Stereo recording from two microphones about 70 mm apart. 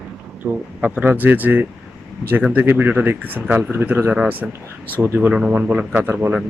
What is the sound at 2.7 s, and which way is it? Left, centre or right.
Speech, right.